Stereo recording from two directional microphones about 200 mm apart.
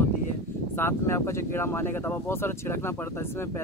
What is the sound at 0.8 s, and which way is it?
Speech, 10° left (ahead or behind).